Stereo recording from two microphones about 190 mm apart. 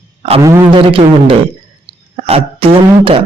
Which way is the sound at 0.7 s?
30° right (ahead or behind).